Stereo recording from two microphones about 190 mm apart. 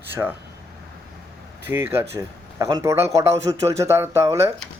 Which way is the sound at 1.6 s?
15° right (ahead or behind).